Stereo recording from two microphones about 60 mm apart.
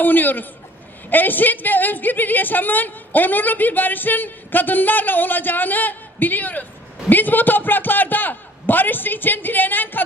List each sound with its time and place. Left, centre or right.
0.0 s a woman's voice: left